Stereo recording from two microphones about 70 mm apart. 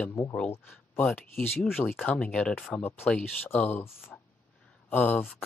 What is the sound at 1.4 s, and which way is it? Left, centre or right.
Speech, left.